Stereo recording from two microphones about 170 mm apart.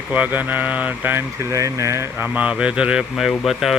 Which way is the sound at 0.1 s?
10° right (ahead or behind).